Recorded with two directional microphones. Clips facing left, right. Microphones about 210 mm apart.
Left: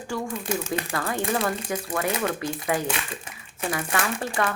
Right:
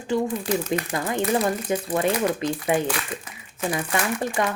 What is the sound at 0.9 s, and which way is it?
Speech, 20° right (ahead or behind).